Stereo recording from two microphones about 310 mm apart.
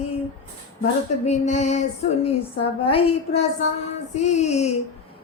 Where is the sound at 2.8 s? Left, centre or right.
Centre.